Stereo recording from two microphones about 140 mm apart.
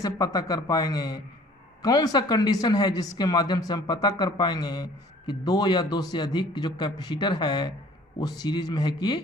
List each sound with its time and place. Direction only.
0.0 s speech: 25° left (ahead or behind)